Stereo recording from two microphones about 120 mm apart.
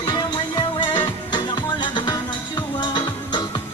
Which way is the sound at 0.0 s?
35° left (ahead or behind).